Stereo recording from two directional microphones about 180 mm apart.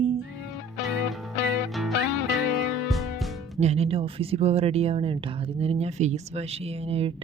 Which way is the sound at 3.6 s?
35° right (ahead or behind).